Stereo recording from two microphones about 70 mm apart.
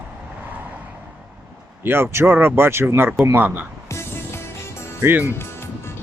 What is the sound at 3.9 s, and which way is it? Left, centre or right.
Music, left.